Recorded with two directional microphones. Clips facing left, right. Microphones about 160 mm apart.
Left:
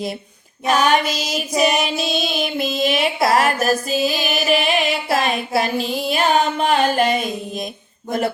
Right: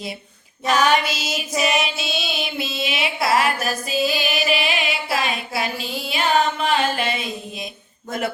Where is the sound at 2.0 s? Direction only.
45° left (ahead or behind).